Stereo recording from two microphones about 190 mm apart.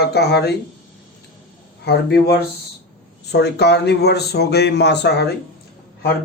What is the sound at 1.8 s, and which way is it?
Speech, 60° left (ahead or behind).